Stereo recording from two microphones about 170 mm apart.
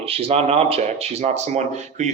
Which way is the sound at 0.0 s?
35° right (ahead or behind).